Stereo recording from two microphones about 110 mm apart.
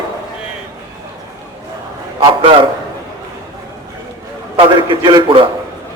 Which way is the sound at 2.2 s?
50° right (ahead or behind).